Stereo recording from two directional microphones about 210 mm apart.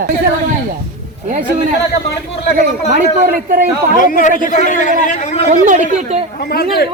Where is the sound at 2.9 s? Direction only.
45° right (ahead or behind).